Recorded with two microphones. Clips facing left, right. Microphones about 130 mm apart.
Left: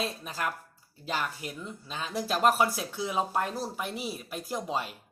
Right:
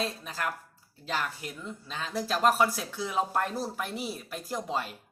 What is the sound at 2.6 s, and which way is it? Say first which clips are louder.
Speech: even; 20° left (ahead or behind).